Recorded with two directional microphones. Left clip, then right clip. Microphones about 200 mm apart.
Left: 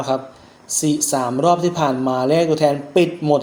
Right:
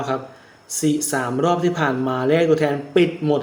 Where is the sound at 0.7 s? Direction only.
15° left (ahead or behind).